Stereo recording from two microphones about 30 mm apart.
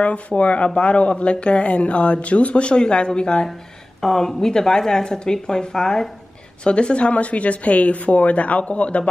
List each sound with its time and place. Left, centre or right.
0.4 s a woman's voice: left
4.0 s speech: centre
6.6 s a woman's voice: left